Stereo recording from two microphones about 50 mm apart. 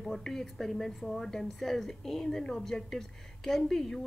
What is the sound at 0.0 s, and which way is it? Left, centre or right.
A woman's voice, centre.